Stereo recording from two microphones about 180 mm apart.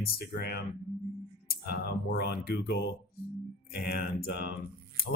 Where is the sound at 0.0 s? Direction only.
55° left (ahead or behind).